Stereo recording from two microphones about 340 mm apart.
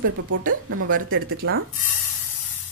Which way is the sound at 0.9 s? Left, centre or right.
Right.